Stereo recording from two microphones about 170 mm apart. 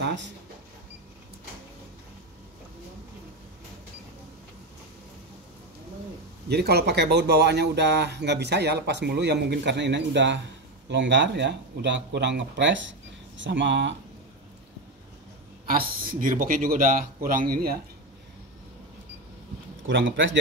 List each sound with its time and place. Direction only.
0.0 s a sound: 90° right
6.5 s speech: 70° right (ahead or behind); by 13.9 s 90° right
15.6 s a man's voice: 55° right (ahead or behind)
19.9 s speech: 90° right